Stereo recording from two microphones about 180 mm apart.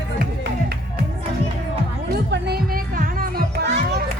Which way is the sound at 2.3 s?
60° right (ahead or behind).